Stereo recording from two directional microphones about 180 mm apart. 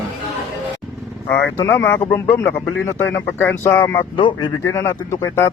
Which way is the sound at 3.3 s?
10° left (ahead or behind).